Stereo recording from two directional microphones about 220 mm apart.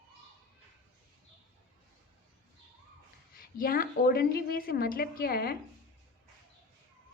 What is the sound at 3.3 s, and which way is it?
A woman's voice, 40° left (ahead or behind).